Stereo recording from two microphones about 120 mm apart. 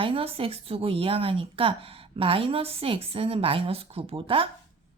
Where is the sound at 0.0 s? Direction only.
50° right (ahead or behind).